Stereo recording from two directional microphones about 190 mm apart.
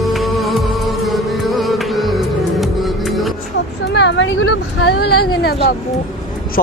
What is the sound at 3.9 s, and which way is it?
Speech, 70° left (ahead or behind).